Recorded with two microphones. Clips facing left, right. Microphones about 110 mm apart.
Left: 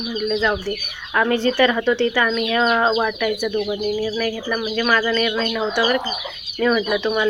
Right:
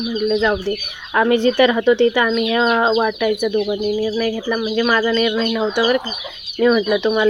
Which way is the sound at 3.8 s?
30° right (ahead or behind).